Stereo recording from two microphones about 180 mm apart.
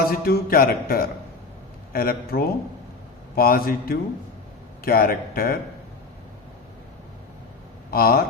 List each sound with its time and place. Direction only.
0.0 s mantra: 55° left (ahead or behind)
7.9 s speech: 55° left (ahead or behind)